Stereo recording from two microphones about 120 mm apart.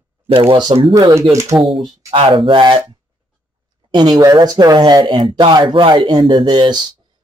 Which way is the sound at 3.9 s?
35° right (ahead or behind).